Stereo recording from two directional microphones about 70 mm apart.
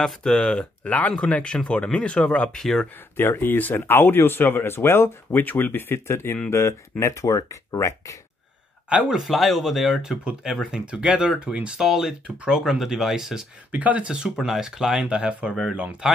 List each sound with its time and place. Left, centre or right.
0.0 s speech: centre
3.2 s speech: left
8.8 s speech: centre
9.2 s speech: centre
13.7 s speech: right